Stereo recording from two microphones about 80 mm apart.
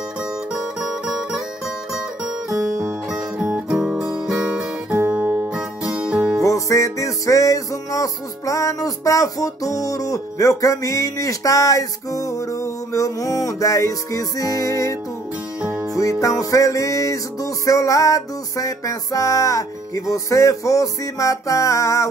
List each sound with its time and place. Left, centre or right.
0.5 s music: centre
2.5 s music: right
3.1 s music: centre
3.7 s guitar: centre
5.1 s music: right
6.4 s music: left